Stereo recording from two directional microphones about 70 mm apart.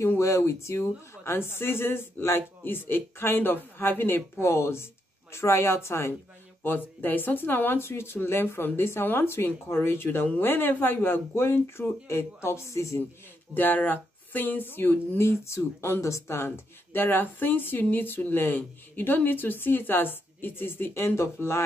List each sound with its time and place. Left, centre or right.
0.2 s speech: left
6.6 s speech: left
13.6 s speech: left